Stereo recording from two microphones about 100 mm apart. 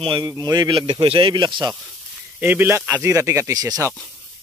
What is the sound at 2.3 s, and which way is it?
Speech, 20° right (ahead or behind).